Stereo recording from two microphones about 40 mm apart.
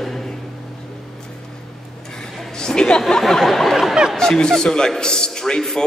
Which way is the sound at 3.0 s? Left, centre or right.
Centre.